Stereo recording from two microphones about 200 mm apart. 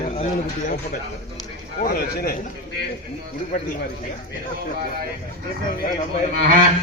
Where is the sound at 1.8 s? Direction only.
50° left (ahead or behind).